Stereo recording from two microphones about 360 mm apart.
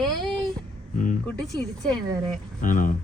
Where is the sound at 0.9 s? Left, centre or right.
Left.